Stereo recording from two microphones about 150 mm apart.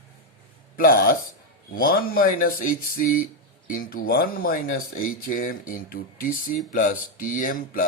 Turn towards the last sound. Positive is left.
turn(degrees=65)  # may be behind; listen again after turning